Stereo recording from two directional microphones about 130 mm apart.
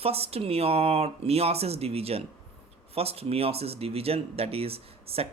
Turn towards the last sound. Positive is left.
turn(degrees=-50)  # may be behind; listen again after turning